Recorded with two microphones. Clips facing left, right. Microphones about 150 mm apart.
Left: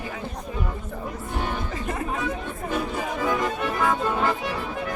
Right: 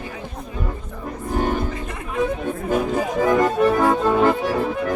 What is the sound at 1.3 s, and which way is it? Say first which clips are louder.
Music: right 8 dB; 45° right (ahead or behind).